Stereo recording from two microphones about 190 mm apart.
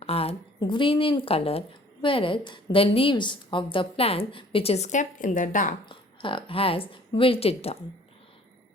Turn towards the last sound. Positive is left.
turn(degrees=30)  # may be behind; listen again after turning